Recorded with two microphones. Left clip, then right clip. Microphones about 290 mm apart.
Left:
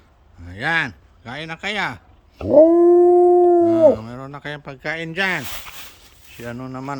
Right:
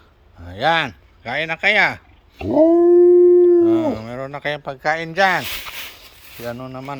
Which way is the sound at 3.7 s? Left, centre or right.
Centre.